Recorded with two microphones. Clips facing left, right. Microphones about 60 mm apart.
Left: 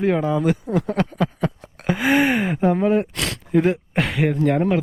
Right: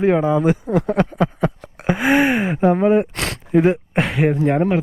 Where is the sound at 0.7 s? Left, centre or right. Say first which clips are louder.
Right 4 dB; right.